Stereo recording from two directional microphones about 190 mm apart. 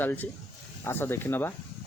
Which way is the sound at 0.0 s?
10° left (ahead or behind).